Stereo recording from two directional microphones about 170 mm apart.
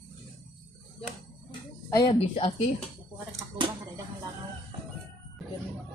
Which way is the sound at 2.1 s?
35° left (ahead or behind).